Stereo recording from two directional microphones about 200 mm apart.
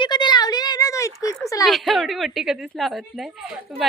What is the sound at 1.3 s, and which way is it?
Speech, 15° left (ahead or behind).